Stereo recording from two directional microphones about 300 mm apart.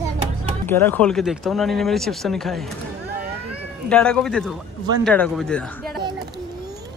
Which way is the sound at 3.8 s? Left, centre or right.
Centre.